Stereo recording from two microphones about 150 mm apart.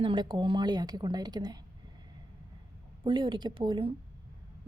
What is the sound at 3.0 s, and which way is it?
Speech, 35° right (ahead or behind).